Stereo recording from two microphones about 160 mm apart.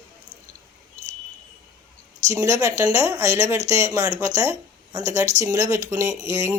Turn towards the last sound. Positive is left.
turn(degrees=-20)  # may be behind; listen again after turning